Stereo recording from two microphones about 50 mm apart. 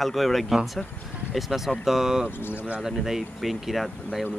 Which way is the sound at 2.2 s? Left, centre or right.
Left.